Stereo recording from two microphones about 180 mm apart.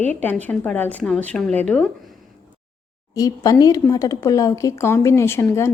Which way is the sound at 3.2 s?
20° left (ahead or behind).